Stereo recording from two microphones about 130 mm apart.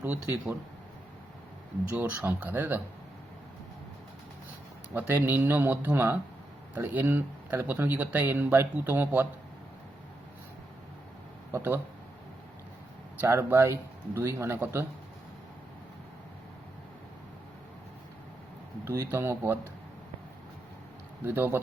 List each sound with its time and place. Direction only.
0.0 s speech: 15° right (ahead or behind)
1.9 s speech: 15° right (ahead or behind)
4.9 s speech: 15° right (ahead or behind)
11.5 s speech: 15° right (ahead or behind)
13.2 s speech: 20° right (ahead or behind)
18.9 s speech: 20° right (ahead or behind)
21.2 s speech: 15° right (ahead or behind)